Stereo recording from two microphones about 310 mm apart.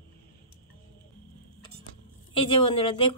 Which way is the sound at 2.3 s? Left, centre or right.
Centre.